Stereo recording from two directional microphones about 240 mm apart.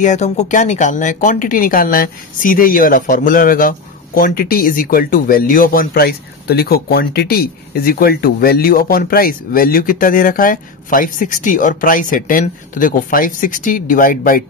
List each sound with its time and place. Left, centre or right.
0.0 s speech: left